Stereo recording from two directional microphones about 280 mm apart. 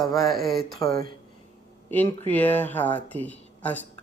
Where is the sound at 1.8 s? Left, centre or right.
Centre.